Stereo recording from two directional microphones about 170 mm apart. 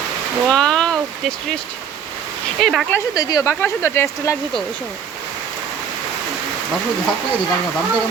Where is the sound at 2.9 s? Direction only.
20° left (ahead or behind).